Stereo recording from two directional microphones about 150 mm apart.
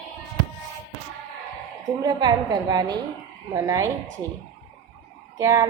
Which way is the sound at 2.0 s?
25° right (ahead or behind).